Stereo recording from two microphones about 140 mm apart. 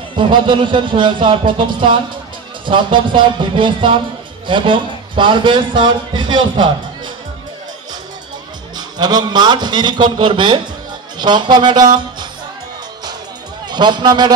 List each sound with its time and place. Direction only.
0.1 s a man's voice: 35° right (ahead or behind)
8.7 s a man's voice: 30° right (ahead or behind)
13.7 s a man's voice: 30° right (ahead or behind)